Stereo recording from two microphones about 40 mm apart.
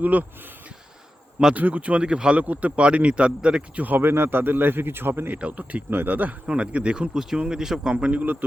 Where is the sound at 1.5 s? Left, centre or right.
Right.